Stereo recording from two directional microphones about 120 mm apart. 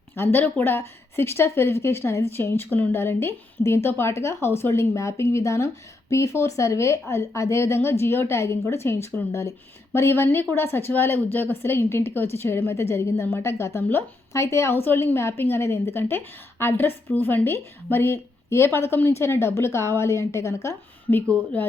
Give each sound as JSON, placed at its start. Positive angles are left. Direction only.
{"t": 0.2, "sound": "a woman's voice", "side_deg": 20}